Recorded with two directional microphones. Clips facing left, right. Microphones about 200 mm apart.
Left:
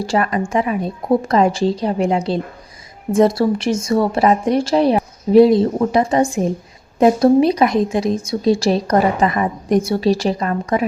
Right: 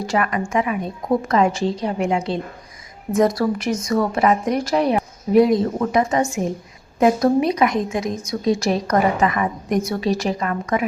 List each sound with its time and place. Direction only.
0.0 s a woman's voice: 30° left (ahead or behind)